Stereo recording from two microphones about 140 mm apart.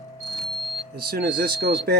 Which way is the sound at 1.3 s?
90° right.